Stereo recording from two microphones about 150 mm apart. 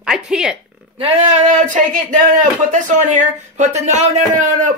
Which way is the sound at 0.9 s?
40° right (ahead or behind).